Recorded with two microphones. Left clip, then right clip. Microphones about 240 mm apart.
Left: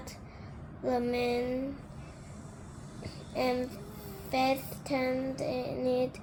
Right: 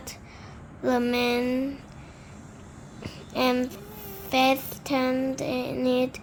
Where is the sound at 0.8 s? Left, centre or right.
Right.